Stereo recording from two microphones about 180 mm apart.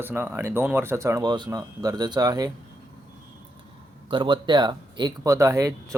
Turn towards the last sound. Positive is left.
turn(degrees=-15)  # may be behind; listen again after turning